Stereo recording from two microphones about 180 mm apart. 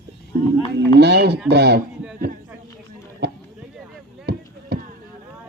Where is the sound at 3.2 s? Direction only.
65° right (ahead or behind).